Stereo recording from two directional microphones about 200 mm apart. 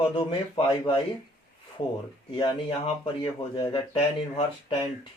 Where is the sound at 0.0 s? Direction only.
25° left (ahead or behind).